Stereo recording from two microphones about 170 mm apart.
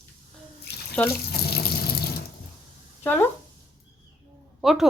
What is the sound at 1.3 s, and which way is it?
Water, 65° left (ahead or behind).